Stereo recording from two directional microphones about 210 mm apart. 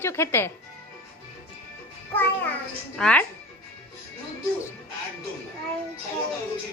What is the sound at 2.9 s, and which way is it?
Speech, 5° left (ahead or behind).